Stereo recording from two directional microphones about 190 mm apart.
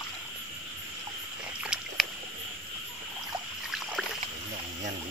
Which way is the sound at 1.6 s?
5° right (ahead or behind).